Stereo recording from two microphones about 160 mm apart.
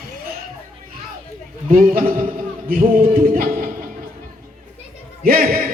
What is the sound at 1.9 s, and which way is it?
A man's voice, 65° right (ahead or behind).